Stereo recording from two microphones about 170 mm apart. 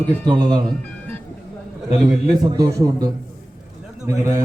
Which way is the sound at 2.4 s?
20° right (ahead or behind).